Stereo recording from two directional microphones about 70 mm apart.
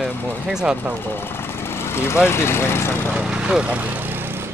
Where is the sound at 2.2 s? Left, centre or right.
Left.